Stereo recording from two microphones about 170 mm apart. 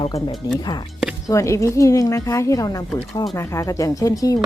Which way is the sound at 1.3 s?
20° left (ahead or behind).